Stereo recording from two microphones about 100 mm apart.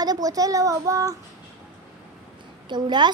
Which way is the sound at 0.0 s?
40° right (ahead or behind).